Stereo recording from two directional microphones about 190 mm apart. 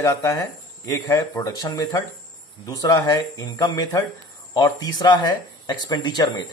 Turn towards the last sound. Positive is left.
turn(degrees=20)  # may be behind; listen again after turning